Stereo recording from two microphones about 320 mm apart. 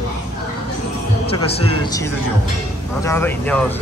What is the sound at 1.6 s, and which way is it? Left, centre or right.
Speech, centre.